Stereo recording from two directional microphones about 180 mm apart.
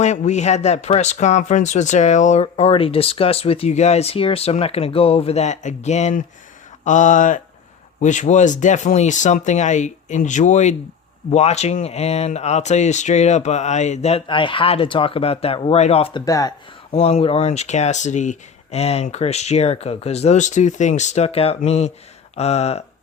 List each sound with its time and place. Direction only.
0.0 s speech: 40° left (ahead or behind)
16.2 s speech: 20° left (ahead or behind)
16.9 s speech: 35° left (ahead or behind)